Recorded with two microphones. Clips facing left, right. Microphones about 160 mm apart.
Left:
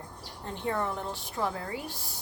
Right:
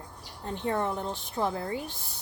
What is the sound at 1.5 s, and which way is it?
Speech, 30° right (ahead or behind).